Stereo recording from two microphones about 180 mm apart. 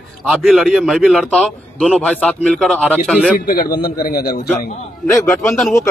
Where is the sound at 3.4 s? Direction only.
55° left (ahead or behind).